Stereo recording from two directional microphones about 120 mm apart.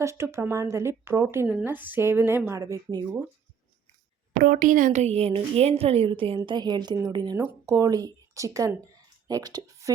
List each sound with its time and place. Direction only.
0.0 s speech: 25° right (ahead or behind)
4.6 s a woman's voice: 90° right; by 9.9 s 30° right (ahead or behind)